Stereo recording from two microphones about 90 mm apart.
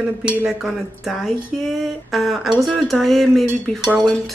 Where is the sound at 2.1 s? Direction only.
Centre (ahead or behind).